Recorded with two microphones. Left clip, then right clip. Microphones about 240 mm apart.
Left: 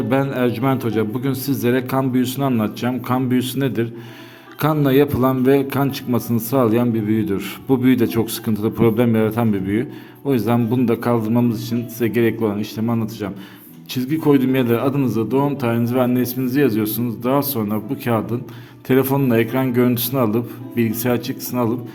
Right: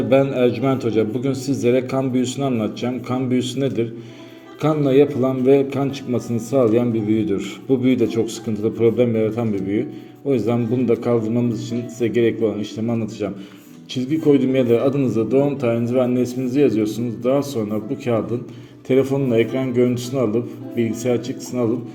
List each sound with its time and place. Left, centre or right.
0.1 s a man's voice: left